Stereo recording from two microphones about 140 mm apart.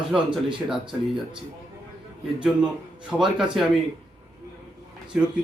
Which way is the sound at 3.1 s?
5° right (ahead or behind).